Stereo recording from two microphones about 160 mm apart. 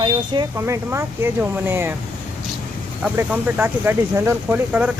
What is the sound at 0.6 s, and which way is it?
Speech, 15° right (ahead or behind).